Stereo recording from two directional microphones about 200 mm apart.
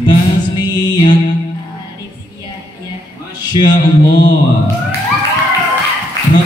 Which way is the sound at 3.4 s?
20° left (ahead or behind).